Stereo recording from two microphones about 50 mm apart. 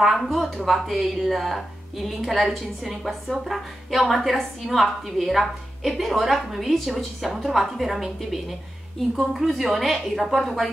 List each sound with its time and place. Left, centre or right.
0.0 s a woman's voice: centre